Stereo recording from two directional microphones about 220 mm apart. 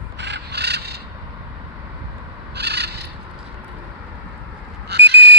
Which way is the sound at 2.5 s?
50° right (ahead or behind).